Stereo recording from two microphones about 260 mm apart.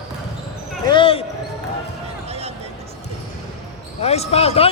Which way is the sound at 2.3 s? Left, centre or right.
Right.